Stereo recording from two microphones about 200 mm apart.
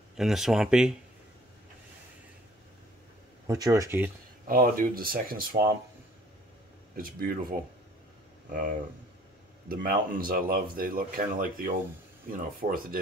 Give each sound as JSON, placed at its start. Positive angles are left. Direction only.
{"t": 0.2, "sound": "speech", "side_deg": 0}
{"t": 3.4, "sound": "speech", "side_deg": -20}
{"t": 4.5, "sound": "speech", "side_deg": -45}
{"t": 7.0, "sound": "speech", "side_deg": -45}
{"t": 8.5, "sound": "speech", "side_deg": -45}